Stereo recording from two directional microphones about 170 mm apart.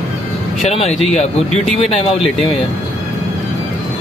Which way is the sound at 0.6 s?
40° left (ahead or behind).